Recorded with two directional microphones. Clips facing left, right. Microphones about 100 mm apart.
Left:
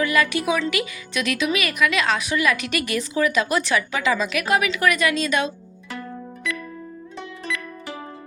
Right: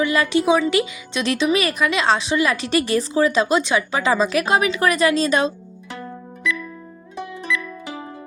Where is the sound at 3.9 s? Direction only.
35° right (ahead or behind).